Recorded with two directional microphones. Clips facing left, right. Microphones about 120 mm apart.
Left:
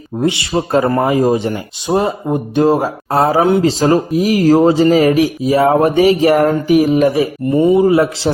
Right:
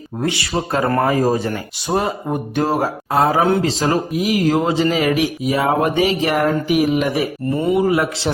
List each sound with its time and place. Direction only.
0.2 s speech: 20° left (ahead or behind)
0.9 s speech: 15° left (ahead or behind)
3.1 s speech: 35° left (ahead or behind)
7.5 s speech: 25° left (ahead or behind)